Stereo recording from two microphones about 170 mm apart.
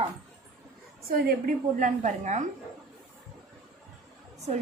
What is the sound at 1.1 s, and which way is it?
A woman's voice, 65° right (ahead or behind).